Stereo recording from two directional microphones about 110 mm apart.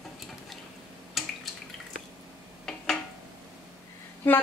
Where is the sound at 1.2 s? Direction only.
Centre (ahead or behind).